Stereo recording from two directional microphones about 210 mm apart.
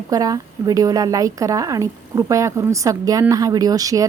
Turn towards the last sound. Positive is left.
turn(degrees=-15)  # may be behind; listen again after turning